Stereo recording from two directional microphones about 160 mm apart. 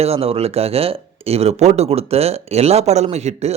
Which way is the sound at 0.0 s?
40° right (ahead or behind).